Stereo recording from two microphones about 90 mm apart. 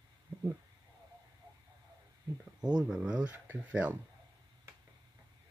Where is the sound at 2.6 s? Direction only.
50° right (ahead or behind).